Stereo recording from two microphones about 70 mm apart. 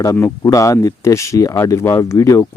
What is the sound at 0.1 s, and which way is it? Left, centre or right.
Speech, left.